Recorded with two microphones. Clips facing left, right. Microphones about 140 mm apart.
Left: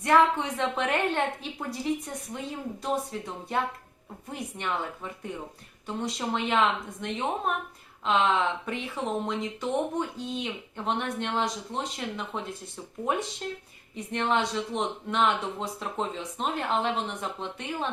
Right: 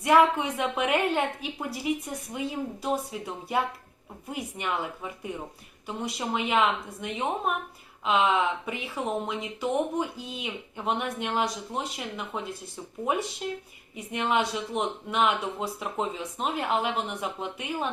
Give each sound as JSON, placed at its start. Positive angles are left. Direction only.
{"t": 0.0, "sound": "speech", "side_deg": -10}